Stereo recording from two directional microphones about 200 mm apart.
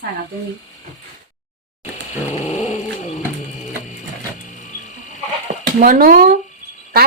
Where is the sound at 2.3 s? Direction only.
35° left (ahead or behind).